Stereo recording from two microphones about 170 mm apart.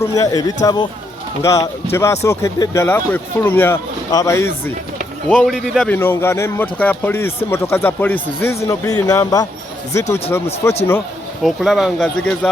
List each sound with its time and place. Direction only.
0.0 s a man's voice: 20° left (ahead or behind)
5.3 s speech: centre (ahead or behind)
5.9 s speech: 15° left (ahead or behind)
11.4 s speech: centre (ahead or behind)